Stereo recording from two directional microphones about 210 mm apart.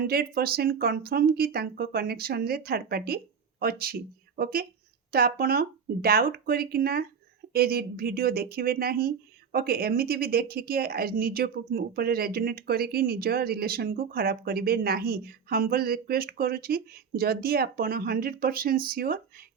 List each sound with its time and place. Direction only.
0.0 s speech: 50° right (ahead or behind)